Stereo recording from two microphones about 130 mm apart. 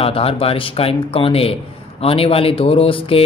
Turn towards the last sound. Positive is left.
turn(degrees=45)  # may be behind; listen again after turning